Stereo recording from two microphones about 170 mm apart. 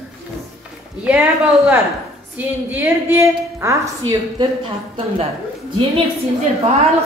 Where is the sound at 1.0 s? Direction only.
10° right (ahead or behind).